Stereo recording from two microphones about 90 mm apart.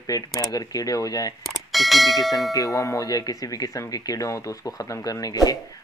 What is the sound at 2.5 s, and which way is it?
Speech, 40° left (ahead or behind).